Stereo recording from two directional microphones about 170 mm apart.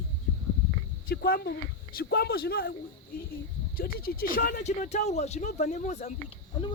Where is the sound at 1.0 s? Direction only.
65° left (ahead or behind); by 6.3 s 40° left (ahead or behind).